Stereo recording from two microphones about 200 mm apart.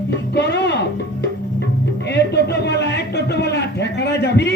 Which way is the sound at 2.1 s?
55° left (ahead or behind).